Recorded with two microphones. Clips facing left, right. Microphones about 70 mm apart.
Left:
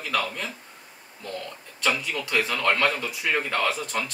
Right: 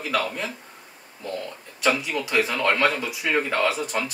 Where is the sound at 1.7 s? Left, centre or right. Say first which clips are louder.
Right 3 dB; centre.